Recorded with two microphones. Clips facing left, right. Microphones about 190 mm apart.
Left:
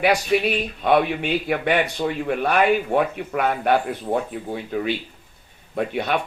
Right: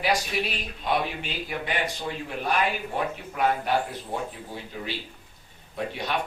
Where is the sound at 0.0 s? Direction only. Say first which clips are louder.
Left 8 dB; 60° left (ahead or behind).